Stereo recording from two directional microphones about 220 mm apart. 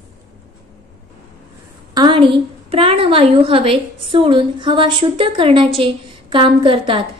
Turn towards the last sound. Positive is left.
turn(degrees=-25)  # may be behind; listen again after turning